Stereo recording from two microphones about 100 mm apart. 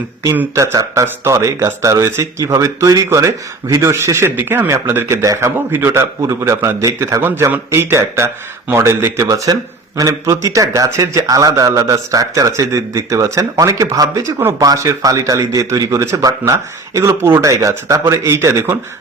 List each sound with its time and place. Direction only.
0.5 s speech: 30° right (ahead or behind)